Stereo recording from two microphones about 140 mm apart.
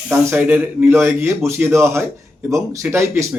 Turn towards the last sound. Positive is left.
turn(degrees=-20)  # may be behind; listen again after turning